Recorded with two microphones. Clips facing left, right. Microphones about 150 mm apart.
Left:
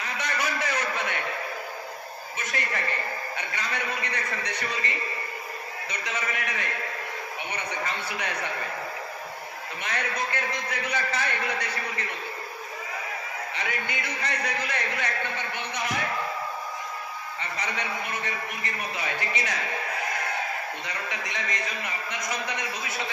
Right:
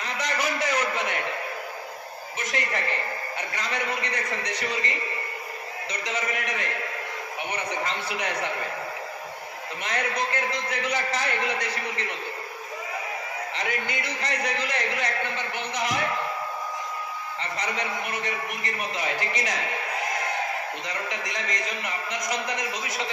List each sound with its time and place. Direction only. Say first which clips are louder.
0.0 s a sound: right 2 dB; 30° right (ahead or behind)
2.5 s a man's voice: right 2 dB; 30° right (ahead or behind)
6.0 s a man's voice: right 2 dB; 30° right (ahead or behind)
9.8 s a man's voice: right 3 dB; 30° right (ahead or behind)
13.6 s a man's voice: right 2 dB; 30° right (ahead or behind)
17.6 s a man's voice: right 2 dB; 35° right (ahead or behind)
20.9 s a man's voice: right 2 dB; 35° right (ahead or behind)